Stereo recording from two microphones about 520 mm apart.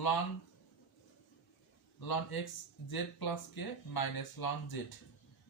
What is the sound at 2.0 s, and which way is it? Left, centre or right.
Speech, left.